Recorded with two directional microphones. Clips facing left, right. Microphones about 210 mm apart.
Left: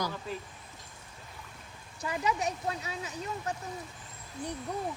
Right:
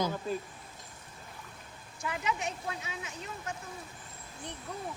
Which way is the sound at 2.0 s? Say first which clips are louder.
Left 3 dB; 35° left (ahead or behind).